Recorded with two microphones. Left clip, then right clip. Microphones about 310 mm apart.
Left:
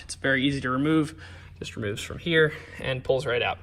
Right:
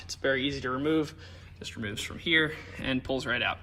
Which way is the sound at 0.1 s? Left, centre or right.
Left.